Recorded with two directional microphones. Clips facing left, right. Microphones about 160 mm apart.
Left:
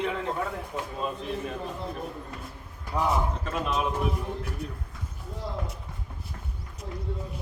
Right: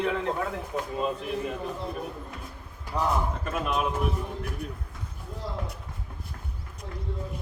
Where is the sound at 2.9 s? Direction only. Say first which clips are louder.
Left 1 dB; 5° left (ahead or behind).